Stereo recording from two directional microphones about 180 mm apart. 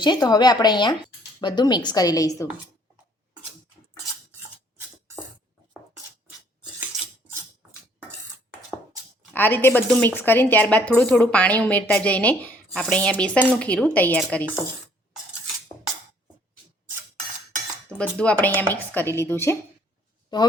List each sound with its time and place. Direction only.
0.0 s a woman's voice: 25° left (ahead or behind)
9.3 s a woman's voice: 10° left (ahead or behind)
17.8 s a woman's voice: 5° left (ahead or behind)